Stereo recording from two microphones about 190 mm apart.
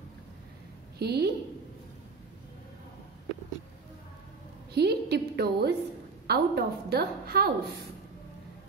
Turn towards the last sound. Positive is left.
turn(degrees=-55)  # may be behind; listen again after turning